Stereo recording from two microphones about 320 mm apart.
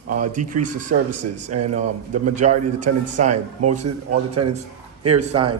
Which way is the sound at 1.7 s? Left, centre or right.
Right.